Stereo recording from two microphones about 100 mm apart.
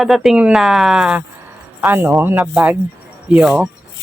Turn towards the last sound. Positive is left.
turn(degrees=-5)  # may be behind; listen again after turning